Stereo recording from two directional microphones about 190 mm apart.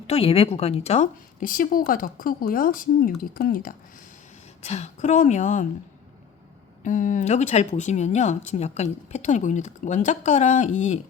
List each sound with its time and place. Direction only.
0.1 s a woman's voice: 30° left (ahead or behind); by 3.8 s 50° left (ahead or behind)
4.6 s speech: 35° left (ahead or behind)
6.8 s speech: 45° left (ahead or behind)